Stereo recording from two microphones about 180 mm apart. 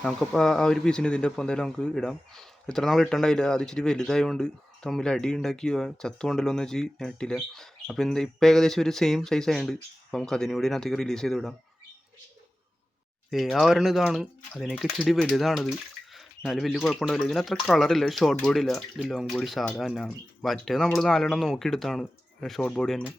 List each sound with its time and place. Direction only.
0.0 s speech: 5° left (ahead or behind)
13.3 s speech: centre (ahead or behind)